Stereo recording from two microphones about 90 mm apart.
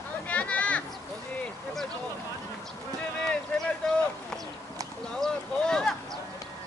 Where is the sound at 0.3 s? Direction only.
15° left (ahead or behind).